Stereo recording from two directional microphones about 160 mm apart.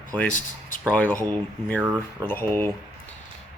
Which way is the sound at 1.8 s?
10° right (ahead or behind).